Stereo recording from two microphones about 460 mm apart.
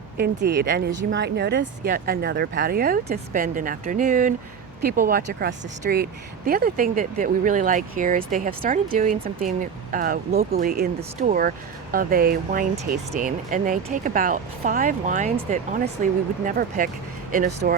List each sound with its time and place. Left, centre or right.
0.2 s speech: right